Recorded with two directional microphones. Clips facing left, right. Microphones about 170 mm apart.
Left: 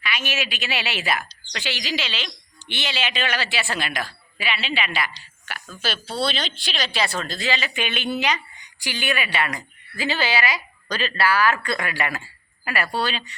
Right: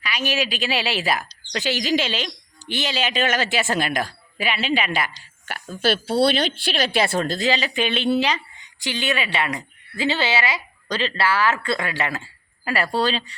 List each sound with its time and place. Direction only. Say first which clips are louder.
0.0 s speech: right 4 dB; 35° right (ahead or behind)
5.8 s a woman's voice: right 7 dB; 55° right (ahead or behind); by 13.3 s 35° right (ahead or behind)